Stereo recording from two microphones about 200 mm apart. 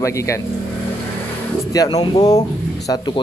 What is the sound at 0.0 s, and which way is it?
Speech, 15° left (ahead or behind).